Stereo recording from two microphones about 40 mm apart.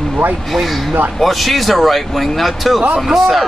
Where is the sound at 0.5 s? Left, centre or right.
Centre.